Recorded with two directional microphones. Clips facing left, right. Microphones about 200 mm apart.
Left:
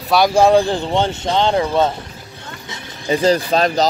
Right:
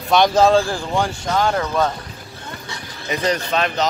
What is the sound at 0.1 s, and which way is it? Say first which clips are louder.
Speech: left 2 dB; 5° left (ahead or behind).